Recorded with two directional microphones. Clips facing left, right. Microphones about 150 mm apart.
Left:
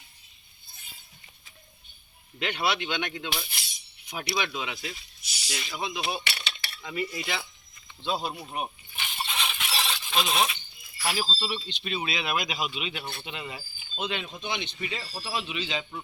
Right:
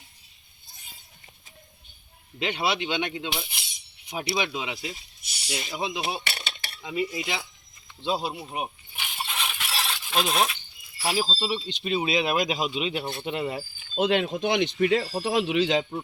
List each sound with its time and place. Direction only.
2.4 s speech: 25° right (ahead or behind)
5.2 s a sound: 60° right (ahead or behind)
5.7 s speech: 20° right (ahead or behind)
6.2 s cutlery: 45° right (ahead or behind)
6.8 s cutlery: 20° right (ahead or behind)
8.4 s a sound: 10° right (ahead or behind)
10.9 s speech: 30° right (ahead or behind)
11.3 s cutlery: 20° right (ahead or behind)
11.5 s speech: 35° right (ahead or behind)
13.2 s speech: 50° right (ahead or behind)
14.0 s speech: 75° right (ahead or behind)